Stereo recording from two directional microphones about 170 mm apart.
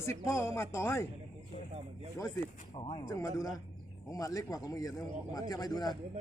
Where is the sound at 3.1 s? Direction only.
20° left (ahead or behind).